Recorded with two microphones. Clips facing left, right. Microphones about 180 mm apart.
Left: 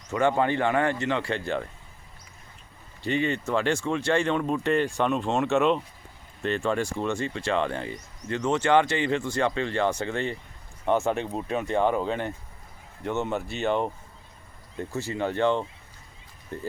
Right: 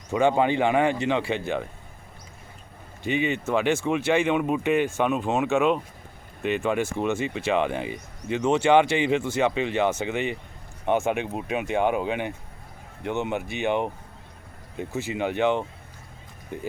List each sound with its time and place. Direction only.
0.1 s speech: 15° right (ahead or behind)
3.0 s speech: 15° right (ahead or behind)
6.4 s speech: 15° right (ahead or behind)